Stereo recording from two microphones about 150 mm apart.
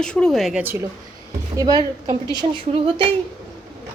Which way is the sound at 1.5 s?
25° right (ahead or behind).